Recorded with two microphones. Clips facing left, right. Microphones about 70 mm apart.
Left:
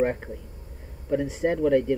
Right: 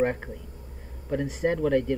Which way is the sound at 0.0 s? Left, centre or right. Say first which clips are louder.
Left 1 dB; centre.